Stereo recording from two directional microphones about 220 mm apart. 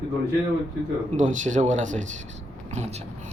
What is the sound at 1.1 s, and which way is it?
Speech, 35° right (ahead or behind).